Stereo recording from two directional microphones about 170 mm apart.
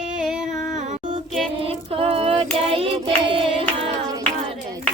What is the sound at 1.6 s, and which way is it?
Child singing, 35° right (ahead or behind).